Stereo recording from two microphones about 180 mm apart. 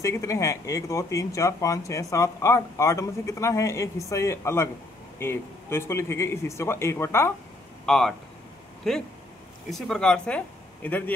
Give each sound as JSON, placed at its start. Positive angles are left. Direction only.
{"t": 0.0, "sound": "speech", "side_deg": 15}
{"t": 7.8, "sound": "speech", "side_deg": 5}